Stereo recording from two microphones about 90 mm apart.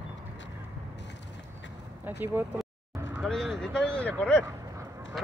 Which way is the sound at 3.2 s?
Centre (ahead or behind).